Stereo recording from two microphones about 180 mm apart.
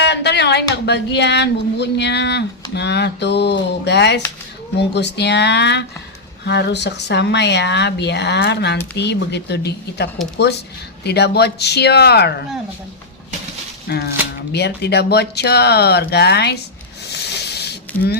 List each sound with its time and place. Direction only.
0.0 s speech: 70° left (ahead or behind)
13.8 s speech: 60° left (ahead or behind)
17.1 s snake: 65° left (ahead or behind)